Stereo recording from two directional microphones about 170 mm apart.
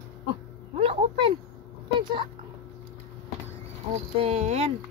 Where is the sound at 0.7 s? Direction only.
35° right (ahead or behind).